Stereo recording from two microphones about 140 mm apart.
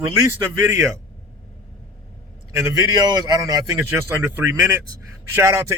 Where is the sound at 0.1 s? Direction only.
20° right (ahead or behind).